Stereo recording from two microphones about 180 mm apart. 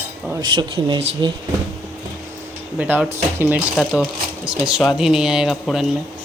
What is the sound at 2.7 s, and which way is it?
Speech, 10° right (ahead or behind).